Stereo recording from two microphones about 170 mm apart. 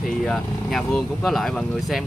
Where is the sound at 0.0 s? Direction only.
Centre (ahead or behind).